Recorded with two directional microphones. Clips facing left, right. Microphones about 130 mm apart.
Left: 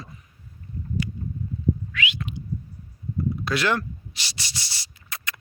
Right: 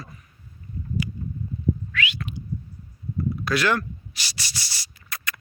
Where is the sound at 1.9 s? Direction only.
20° left (ahead or behind).